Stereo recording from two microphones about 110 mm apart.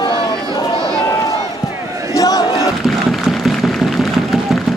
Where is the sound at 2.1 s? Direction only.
35° left (ahead or behind).